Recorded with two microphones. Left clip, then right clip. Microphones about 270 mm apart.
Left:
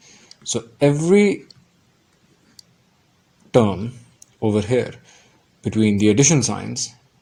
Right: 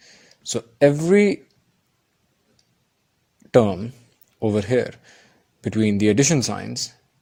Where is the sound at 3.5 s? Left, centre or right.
Right.